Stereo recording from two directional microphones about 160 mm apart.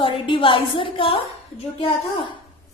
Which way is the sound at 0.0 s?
35° left (ahead or behind).